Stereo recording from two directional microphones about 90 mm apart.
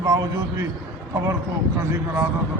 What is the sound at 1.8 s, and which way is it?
Speech, 30° right (ahead or behind).